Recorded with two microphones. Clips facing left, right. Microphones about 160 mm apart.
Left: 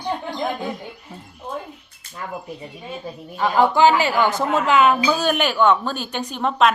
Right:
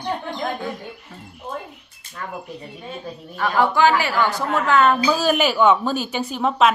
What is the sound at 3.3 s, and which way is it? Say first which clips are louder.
A woman's voice: left 2 dB; 20° left (ahead or behind).